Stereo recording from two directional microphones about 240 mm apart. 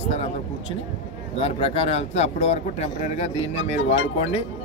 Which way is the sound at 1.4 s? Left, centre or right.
Left.